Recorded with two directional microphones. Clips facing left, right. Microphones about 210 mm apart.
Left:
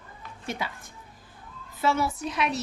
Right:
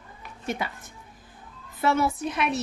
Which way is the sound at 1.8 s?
55° right (ahead or behind).